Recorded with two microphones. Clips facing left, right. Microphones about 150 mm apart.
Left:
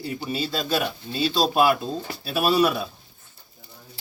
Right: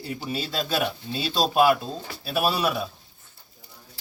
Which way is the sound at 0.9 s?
5° right (ahead or behind).